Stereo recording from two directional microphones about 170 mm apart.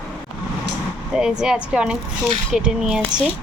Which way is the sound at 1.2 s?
5° right (ahead or behind).